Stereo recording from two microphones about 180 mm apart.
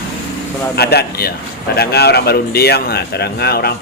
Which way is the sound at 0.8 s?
60° left (ahead or behind).